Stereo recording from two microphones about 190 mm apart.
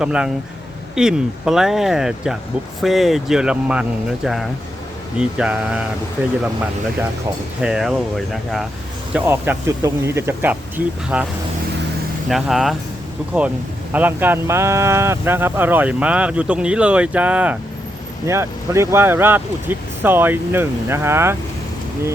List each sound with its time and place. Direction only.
0.0 s speech: 5° right (ahead or behind)
7.6 s speech: centre (ahead or behind)
12.3 s speech: centre (ahead or behind)
13.9 s speech: 10° right (ahead or behind)